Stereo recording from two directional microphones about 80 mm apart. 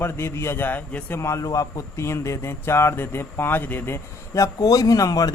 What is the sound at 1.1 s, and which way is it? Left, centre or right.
A man's voice, left.